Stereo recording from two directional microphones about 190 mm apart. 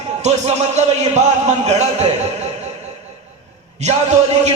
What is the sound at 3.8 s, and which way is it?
Speech, 35° right (ahead or behind).